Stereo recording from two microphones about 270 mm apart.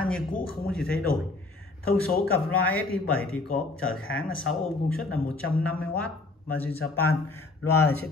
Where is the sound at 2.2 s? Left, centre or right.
Centre.